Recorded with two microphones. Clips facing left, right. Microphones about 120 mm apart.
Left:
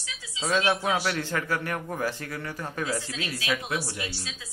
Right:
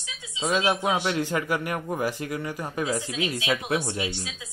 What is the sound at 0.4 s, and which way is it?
A man's voice, 15° right (ahead or behind).